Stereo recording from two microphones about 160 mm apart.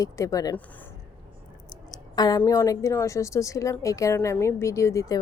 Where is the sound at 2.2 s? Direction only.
25° left (ahead or behind).